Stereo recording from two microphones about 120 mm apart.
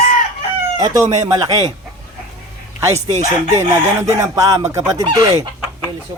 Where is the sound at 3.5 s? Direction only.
25° right (ahead or behind).